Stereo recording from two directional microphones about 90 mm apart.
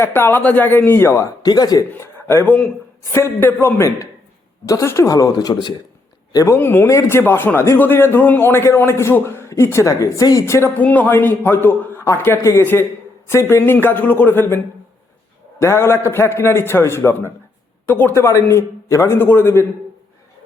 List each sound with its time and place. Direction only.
0.0 s a man's voice: 25° left (ahead or behind)
1.5 s speech: 45° left (ahead or behind)
1.9 s a man's voice: 25° left (ahead or behind); by 5.7 s 50° left (ahead or behind)
6.3 s a woman's voice: 35° left (ahead or behind)
6.6 s a man's voice: 25° left (ahead or behind)
10.8 s a man's voice: 20° left (ahead or behind)